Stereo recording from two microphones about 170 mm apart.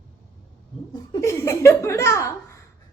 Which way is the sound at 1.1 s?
15° left (ahead or behind).